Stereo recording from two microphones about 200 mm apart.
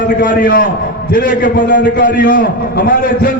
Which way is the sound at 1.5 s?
60° left (ahead or behind).